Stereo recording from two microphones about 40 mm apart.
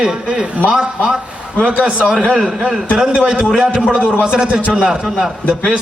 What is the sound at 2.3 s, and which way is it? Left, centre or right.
Speech, centre.